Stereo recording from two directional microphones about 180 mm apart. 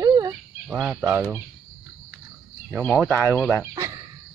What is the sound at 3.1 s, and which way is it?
Speech, 10° left (ahead or behind).